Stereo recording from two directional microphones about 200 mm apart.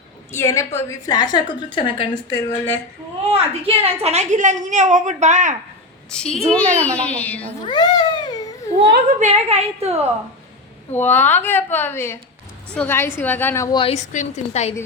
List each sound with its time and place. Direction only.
0.3 s a woman's voice: 15° left (ahead or behind)
2.3 s a woman's voice: 10° left (ahead or behind)
3.2 s a woman's voice: 30° right (ahead or behind)
6.1 s a woman's voice: 5° left (ahead or behind)
7.6 s cat: 20° left (ahead or behind)
9.1 s a woman's voice: 35° right (ahead or behind)
10.9 s a woman's voice: 10° left (ahead or behind); by 14.0 s 25° left (ahead or behind)
14.1 s a woman's voice: 35° left (ahead or behind)